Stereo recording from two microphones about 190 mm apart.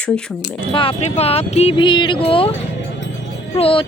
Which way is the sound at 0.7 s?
30° left (ahead or behind).